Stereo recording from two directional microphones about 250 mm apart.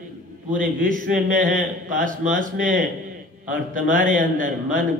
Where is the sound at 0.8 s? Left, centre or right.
Right.